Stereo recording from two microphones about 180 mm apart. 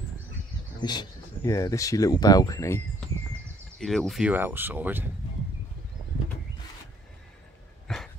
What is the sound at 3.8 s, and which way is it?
Speech, centre (ahead or behind).